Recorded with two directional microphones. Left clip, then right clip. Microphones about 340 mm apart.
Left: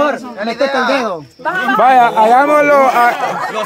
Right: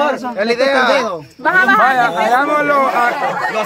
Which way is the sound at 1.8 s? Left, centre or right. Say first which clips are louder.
Left 5 dB; centre.